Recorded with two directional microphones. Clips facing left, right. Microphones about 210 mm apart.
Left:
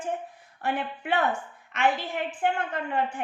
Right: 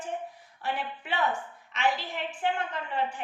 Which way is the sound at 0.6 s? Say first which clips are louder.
Left 4 dB; 55° left (ahead or behind).